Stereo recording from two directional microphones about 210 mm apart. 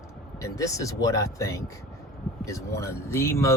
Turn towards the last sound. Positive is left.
turn(degrees=10)  # may be behind; listen again after turning